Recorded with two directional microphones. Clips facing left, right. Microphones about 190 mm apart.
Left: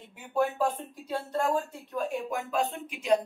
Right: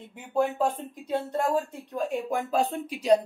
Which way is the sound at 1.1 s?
20° right (ahead or behind).